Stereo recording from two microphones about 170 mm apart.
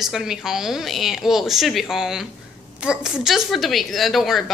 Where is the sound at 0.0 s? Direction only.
Centre (ahead or behind).